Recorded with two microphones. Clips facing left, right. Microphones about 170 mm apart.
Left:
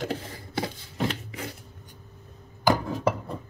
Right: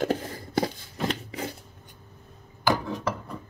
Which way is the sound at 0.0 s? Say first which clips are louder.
Right 5 dB; 45° right (ahead or behind).